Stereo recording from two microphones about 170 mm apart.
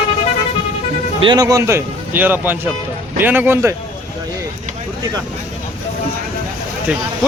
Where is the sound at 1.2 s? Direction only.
25° right (ahead or behind).